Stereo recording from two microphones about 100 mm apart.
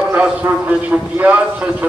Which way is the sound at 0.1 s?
15° right (ahead or behind).